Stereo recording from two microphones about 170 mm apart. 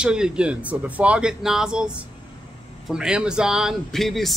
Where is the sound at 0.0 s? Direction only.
5° right (ahead or behind).